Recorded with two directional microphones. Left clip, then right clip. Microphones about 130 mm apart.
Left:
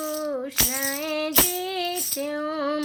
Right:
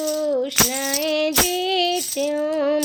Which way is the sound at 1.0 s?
45° right (ahead or behind).